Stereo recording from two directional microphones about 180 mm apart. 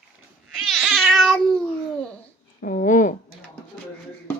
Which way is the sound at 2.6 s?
45° left (ahead or behind).